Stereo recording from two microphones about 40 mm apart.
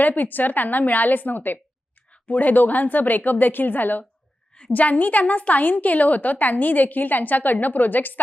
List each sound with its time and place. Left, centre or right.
0.0 s a woman's voice: left